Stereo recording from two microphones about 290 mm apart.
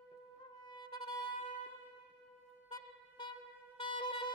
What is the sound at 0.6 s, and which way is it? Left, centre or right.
Music, centre.